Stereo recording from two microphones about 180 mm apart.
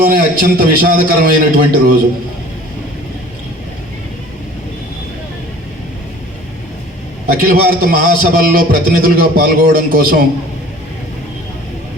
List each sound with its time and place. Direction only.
0.0 s a man's voice: 55° right (ahead or behind)
7.3 s a man's voice: 55° right (ahead or behind)